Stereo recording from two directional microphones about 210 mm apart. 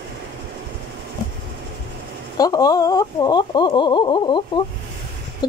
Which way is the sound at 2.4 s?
20° left (ahead or behind).